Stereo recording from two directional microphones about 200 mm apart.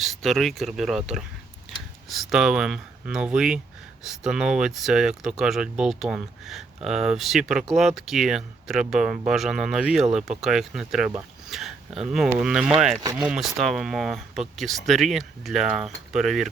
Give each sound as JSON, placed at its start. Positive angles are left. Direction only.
{"t": 0.0, "sound": "speech", "side_deg": 0}
{"t": 13.0, "sound": "speech", "side_deg": -20}
{"t": 13.2, "sound": "speech", "side_deg": -5}